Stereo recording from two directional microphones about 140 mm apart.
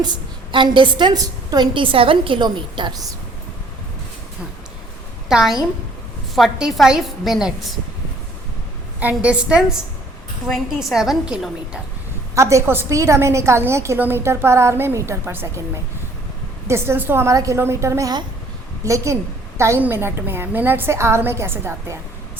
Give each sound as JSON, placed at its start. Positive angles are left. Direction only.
{"t": 0.5, "sound": "a woman's voice", "side_deg": -35}
{"t": 5.3, "sound": "a woman's voice", "side_deg": -5}
{"t": 9.0, "sound": "a woman's voice", "side_deg": -10}
{"t": 12.3, "sound": "a woman's voice", "side_deg": -20}
{"t": 16.6, "sound": "a woman's voice", "side_deg": -15}